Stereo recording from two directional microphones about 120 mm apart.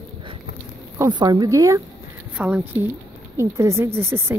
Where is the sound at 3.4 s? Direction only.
25° right (ahead or behind).